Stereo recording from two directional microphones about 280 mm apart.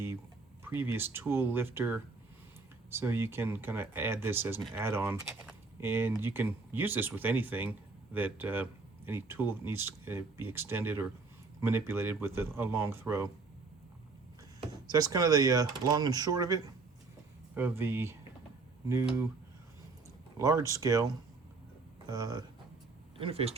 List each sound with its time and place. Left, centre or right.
0.6 s speech: centre
14.9 s speech: centre
20.4 s speech: centre